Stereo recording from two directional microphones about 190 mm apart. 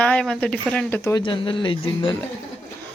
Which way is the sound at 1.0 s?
20° left (ahead or behind).